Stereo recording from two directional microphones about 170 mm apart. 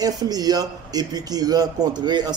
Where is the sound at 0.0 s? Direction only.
20° right (ahead or behind).